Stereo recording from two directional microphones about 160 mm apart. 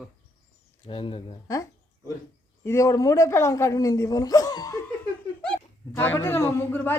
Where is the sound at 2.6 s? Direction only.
20° left (ahead or behind).